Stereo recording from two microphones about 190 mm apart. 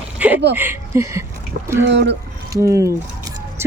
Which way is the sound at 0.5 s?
10° right (ahead or behind).